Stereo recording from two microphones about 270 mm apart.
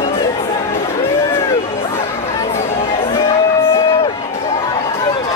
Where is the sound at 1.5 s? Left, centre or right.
Centre.